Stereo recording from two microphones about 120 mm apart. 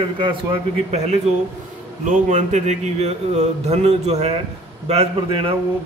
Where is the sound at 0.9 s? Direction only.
65° right (ahead or behind).